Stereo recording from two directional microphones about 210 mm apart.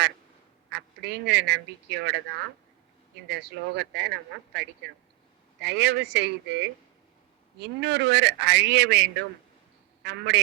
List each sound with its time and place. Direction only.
0.7 s a woman's voice: 55° right (ahead or behind)